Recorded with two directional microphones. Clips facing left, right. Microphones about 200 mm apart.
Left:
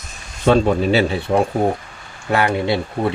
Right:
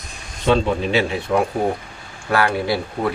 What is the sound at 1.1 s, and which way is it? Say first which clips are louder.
Speech: left 2 dB; 30° left (ahead or behind).